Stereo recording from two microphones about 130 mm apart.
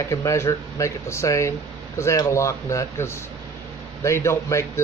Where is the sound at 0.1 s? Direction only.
25° left (ahead or behind).